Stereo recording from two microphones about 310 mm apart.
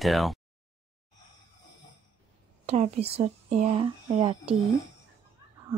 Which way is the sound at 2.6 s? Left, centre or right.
Right.